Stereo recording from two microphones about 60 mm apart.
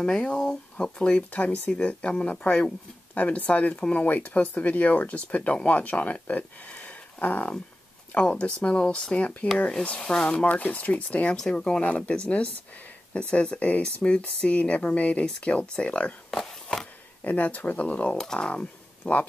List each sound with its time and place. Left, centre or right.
0.0 s speech: centre
11.3 s speech: centre
16.3 s a sound: centre
17.2 s speech: left
18.1 s speech: centre